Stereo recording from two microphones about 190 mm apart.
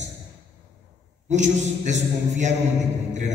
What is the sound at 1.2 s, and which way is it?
Speech, 40° right (ahead or behind).